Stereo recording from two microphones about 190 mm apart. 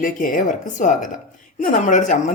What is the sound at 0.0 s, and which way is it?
Speech, 45° left (ahead or behind).